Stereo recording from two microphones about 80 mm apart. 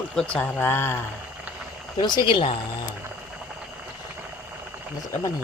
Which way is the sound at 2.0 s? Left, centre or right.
Left.